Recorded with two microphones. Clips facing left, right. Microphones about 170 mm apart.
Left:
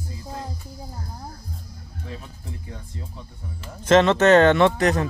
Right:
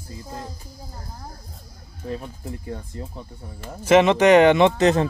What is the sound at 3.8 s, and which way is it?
Speech, 10° right (ahead or behind).